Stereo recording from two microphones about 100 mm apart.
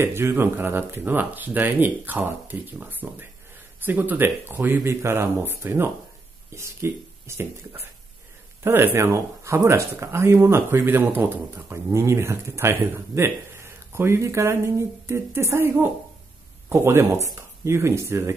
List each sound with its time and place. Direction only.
0.0 s speech: 25° right (ahead or behind)
8.9 s speech: 25° right (ahead or behind)